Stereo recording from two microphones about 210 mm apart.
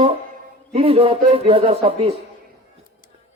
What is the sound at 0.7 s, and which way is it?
A man's voice, 25° right (ahead or behind).